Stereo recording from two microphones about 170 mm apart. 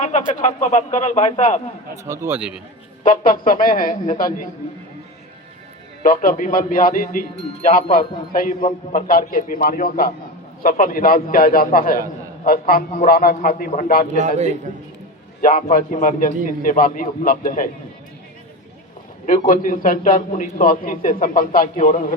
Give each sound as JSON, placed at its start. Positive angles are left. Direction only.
{"t": 0.0, "sound": "a man's voice", "side_deg": 45}
{"t": 2.0, "sound": "a man's voice", "side_deg": -15}
{"t": 3.0, "sound": "speech", "side_deg": 55}
{"t": 6.0, "sound": "a man's voice", "side_deg": 55}
{"t": 14.2, "sound": "a man's voice", "side_deg": -45}
{"t": 15.4, "sound": "a man's voice", "side_deg": 55}
{"t": 19.2, "sound": "a man's voice", "side_deg": 50}